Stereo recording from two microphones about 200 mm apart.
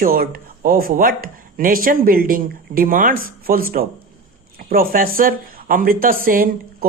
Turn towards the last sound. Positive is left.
turn(degrees=-45)  # may be behind; listen again after turning